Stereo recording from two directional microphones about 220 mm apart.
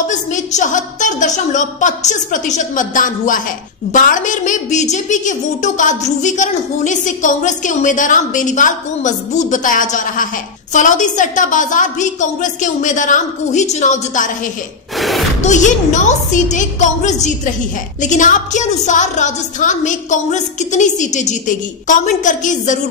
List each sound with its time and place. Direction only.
0.1 s a woman's voice: 35° left (ahead or behind)
15.0 s a sound: centre (ahead or behind)
15.4 s a woman's voice: 35° left (ahead or behind)